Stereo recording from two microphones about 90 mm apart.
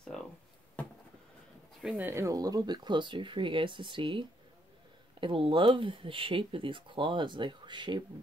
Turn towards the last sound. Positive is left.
turn(degrees=-60)  # may be behind; listen again after turning